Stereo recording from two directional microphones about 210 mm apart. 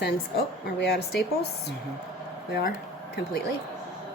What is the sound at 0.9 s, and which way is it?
Speech, 50° left (ahead or behind).